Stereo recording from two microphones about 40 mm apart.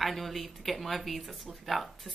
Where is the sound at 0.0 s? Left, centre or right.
Centre.